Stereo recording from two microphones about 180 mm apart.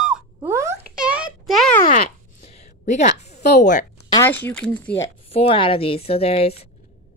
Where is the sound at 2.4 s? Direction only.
35° left (ahead or behind).